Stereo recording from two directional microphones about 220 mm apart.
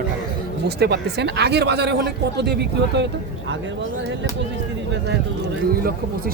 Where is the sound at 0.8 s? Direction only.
50° right (ahead or behind).